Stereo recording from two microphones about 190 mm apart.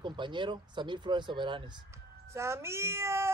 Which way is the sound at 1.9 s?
15° right (ahead or behind).